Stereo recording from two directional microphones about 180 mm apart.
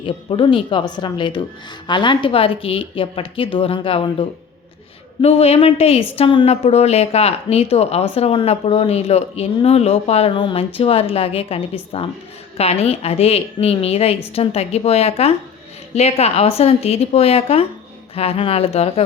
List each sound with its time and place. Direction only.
0.0 s a woman's voice: 25° left (ahead or behind)